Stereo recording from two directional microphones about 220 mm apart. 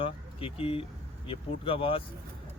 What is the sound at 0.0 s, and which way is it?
Speech, 25° left (ahead or behind).